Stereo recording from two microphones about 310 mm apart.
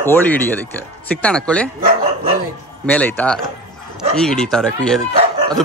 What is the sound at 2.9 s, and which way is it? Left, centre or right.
Speech, centre.